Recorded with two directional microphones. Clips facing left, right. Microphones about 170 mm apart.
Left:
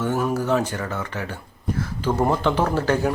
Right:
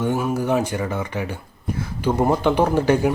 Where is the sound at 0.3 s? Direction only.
15° right (ahead or behind).